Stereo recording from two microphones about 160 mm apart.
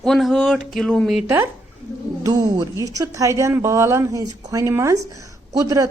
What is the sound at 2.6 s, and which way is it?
A woman's voice, 25° right (ahead or behind).